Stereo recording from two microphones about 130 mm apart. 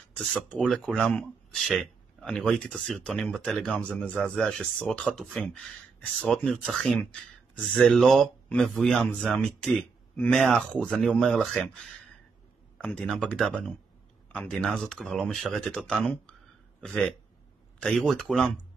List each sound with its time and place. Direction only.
0.2 s speech: centre (ahead or behind)